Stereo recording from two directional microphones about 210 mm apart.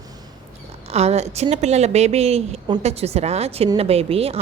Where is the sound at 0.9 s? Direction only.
30° right (ahead or behind).